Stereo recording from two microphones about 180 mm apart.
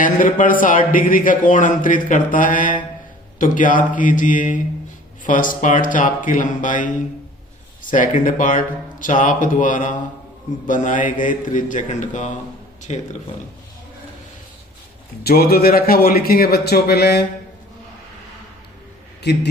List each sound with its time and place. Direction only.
0.0 s speech: 45° left (ahead or behind)
15.2 s a man's voice: 60° left (ahead or behind)
19.2 s a man's voice: 70° left (ahead or behind)